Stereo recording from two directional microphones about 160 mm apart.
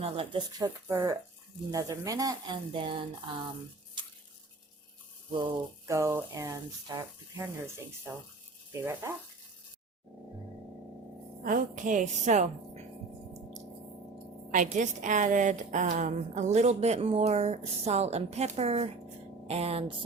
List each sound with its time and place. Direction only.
0.0 s speech: 35° right (ahead or behind)
0.6 s speech: 20° right (ahead or behind)
5.4 s speech: 30° right (ahead or behind)
5.9 s speech: 15° right (ahead or behind)
11.4 s a woman's voice: 55° right (ahead or behind)
14.5 s a woman's voice: 55° right (ahead or behind)